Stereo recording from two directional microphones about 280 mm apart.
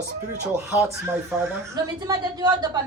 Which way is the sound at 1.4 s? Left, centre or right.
Centre.